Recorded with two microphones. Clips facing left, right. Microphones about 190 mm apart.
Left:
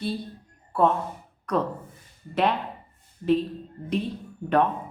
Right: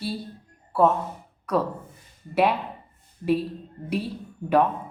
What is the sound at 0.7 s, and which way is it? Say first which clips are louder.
A woman's voice: right 2 dB; 5° right (ahead or behind).